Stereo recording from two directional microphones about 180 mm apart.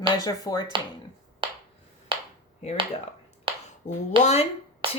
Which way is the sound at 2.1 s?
30° right (ahead or behind).